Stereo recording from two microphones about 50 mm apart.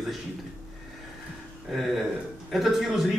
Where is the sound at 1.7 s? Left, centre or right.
Centre.